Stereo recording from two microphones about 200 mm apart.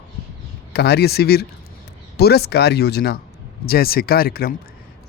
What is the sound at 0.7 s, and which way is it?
Speech, 55° left (ahead or behind).